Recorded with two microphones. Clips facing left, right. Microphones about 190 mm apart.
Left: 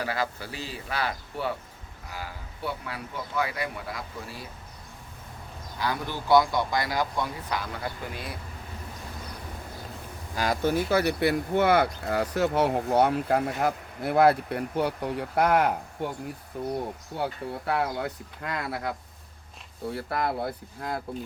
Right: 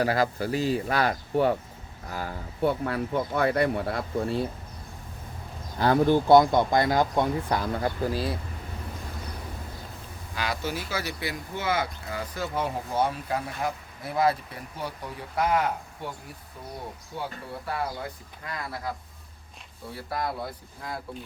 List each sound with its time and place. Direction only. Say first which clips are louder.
0.0 s speech: right 6 dB; 40° right (ahead or behind); by 4.4 s 55° right (ahead or behind)
5.8 s speech: right 10 dB; 55° right (ahead or behind); by 8.4 s 30° right (ahead or behind)
10.3 s speech: left 6 dB; 45° left (ahead or behind); by 15.7 s 60° left (ahead or behind)
17.7 s speech: left 4 dB; 65° left (ahead or behind)